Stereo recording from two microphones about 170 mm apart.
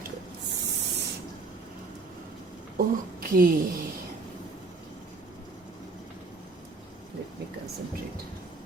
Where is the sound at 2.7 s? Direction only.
60° right (ahead or behind).